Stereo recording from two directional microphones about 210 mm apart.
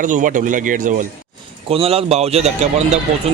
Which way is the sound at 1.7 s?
25° right (ahead or behind).